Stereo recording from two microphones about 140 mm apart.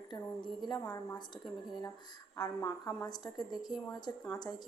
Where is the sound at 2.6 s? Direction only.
15° left (ahead or behind).